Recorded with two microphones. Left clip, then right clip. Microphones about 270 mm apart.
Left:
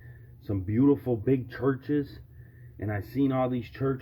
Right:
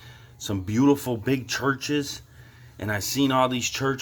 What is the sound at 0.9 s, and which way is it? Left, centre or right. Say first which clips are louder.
Speech: right 2 dB; centre.